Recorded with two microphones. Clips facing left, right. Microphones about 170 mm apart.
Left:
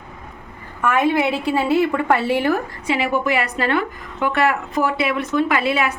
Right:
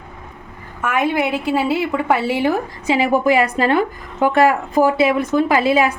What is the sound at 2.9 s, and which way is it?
A woman's voice, 40° right (ahead or behind).